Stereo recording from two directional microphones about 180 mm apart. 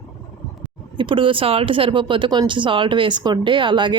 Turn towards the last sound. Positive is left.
turn(degrees=-25)  # may be behind; listen again after turning